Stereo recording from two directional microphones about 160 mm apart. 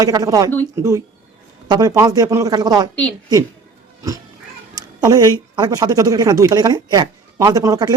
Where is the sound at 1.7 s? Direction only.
25° right (ahead or behind).